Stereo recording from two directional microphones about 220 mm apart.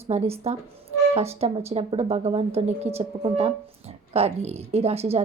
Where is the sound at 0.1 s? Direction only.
30° right (ahead or behind).